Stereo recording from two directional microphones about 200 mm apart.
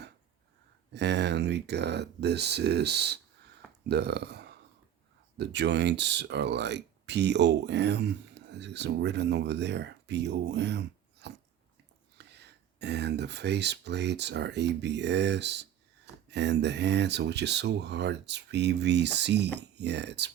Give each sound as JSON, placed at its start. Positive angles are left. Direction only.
{"t": 0.9, "sound": "speech", "side_deg": -60}